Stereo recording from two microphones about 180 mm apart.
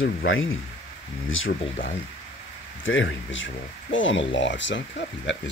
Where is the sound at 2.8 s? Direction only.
90° left.